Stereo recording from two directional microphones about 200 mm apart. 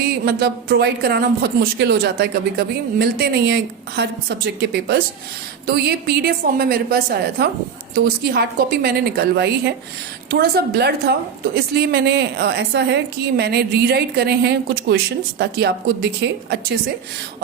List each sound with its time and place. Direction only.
0.0 s a woman's voice: 50° right (ahead or behind)